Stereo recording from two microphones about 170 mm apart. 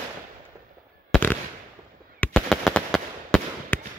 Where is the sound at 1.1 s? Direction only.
10° left (ahead or behind).